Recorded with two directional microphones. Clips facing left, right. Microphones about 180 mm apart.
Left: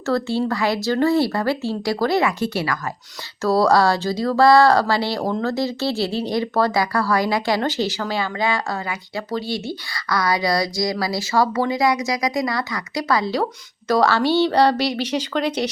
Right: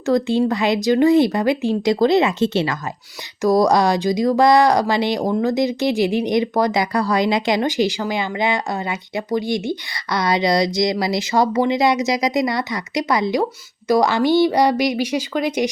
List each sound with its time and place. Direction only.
0.0 s speech: 15° right (ahead or behind)